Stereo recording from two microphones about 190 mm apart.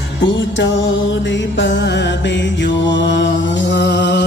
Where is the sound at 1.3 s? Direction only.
70° left (ahead or behind).